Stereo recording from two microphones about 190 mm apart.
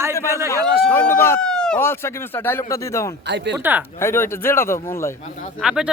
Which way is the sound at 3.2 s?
65° right (ahead or behind).